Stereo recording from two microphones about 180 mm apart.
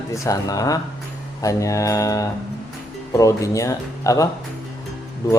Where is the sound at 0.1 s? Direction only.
20° left (ahead or behind).